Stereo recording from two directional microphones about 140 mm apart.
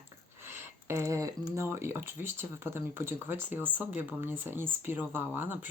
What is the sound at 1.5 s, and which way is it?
Speech, 20° right (ahead or behind).